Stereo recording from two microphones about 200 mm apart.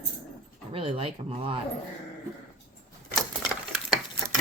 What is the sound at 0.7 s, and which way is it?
Speech, 25° right (ahead or behind).